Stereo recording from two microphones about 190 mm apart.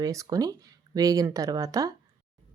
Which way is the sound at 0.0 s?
20° right (ahead or behind).